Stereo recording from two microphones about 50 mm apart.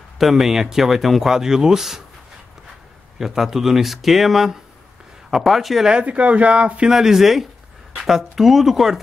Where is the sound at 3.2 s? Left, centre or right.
Centre.